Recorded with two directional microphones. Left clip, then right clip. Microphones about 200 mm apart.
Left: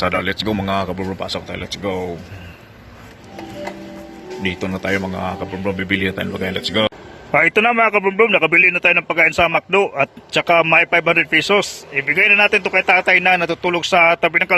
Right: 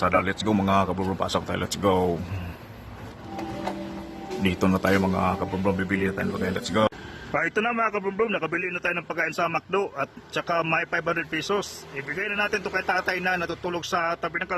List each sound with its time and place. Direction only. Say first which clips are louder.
0.0 s speech: left 4 dB; 5° left (ahead or behind); by 2.0 s 15° right (ahead or behind)
4.6 s speech: even; 5° right (ahead or behind)
5.9 s a man's voice: left 7 dB; 15° left (ahead or behind)
7.3 s a man's voice: left 11 dB; 30° left (ahead or behind)